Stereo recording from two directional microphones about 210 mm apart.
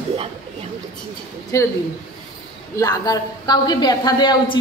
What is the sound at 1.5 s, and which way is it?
Speech, 15° left (ahead or behind).